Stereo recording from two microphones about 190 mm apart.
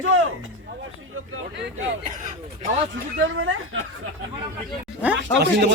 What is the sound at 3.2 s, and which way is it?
Speech, 90° right.